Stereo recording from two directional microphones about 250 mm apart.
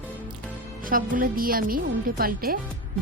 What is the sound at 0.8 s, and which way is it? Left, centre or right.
A woman's voice, right.